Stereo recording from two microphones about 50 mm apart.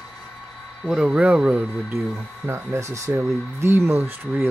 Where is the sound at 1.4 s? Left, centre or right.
Right.